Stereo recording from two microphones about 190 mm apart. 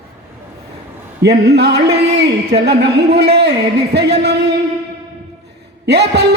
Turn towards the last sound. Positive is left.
turn(degrees=-60)  # may be behind; listen again after turning